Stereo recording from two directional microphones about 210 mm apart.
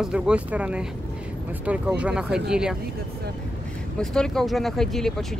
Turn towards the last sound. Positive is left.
turn(degrees=0)  # may be behind; listen again after turning